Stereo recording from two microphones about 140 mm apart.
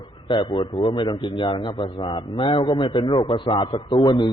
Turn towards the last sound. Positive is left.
turn(degrees=35)  # may be behind; listen again after turning